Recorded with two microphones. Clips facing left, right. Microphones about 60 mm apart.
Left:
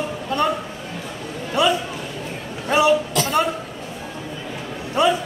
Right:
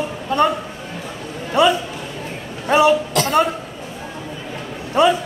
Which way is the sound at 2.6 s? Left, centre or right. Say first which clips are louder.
Right 3 dB; right.